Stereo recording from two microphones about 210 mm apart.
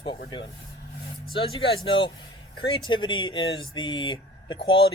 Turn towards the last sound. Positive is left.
turn(degrees=25)  # may be behind; listen again after turning